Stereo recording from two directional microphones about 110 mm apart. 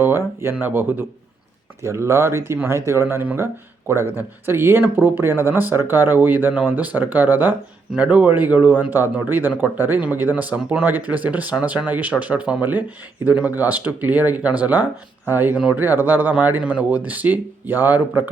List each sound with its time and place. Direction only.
0.0 s speech: 20° right (ahead or behind)